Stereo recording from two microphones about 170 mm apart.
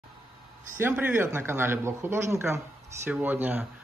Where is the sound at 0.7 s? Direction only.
10° right (ahead or behind).